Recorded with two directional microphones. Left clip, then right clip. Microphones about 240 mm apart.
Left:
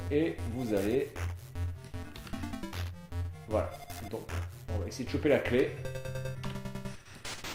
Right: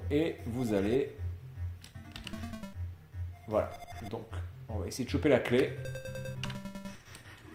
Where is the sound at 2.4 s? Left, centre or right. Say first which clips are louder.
Left 4 dB; centre.